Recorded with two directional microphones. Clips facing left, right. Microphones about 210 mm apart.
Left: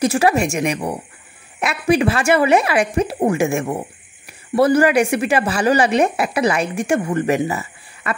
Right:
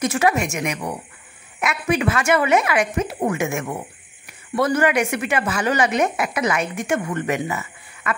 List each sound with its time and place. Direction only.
0.0 s speech: 30° left (ahead or behind)